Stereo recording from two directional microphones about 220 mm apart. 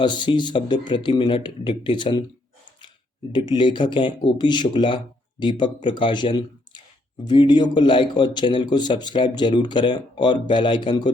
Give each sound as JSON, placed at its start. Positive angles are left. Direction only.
{"t": 0.0, "sound": "a man's voice", "side_deg": 20}
{"t": 3.3, "sound": "a man's voice", "side_deg": 20}